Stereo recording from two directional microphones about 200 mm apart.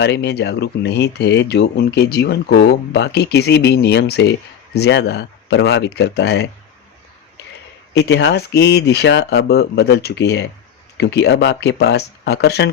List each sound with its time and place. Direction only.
0.0 s speech: 55° left (ahead or behind)
7.9 s speech: 60° left (ahead or behind)